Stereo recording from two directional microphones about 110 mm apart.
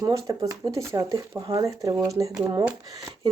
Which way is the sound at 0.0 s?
30° right (ahead or behind).